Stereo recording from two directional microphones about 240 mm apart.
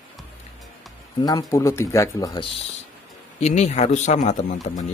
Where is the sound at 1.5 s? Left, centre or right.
Centre.